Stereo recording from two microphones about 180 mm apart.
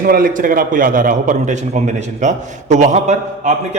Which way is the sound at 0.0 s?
50° right (ahead or behind).